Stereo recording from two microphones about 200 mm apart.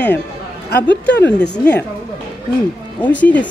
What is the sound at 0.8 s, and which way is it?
Speech, 60° left (ahead or behind).